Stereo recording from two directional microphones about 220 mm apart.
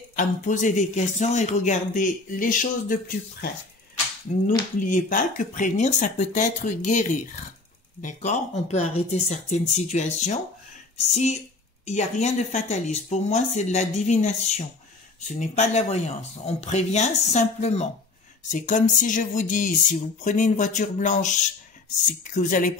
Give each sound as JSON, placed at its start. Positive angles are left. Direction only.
{"t": 0.1, "sound": "speech", "side_deg": 35}
{"t": 4.7, "sound": "speech", "side_deg": 35}
{"t": 11.8, "sound": "speech", "side_deg": 30}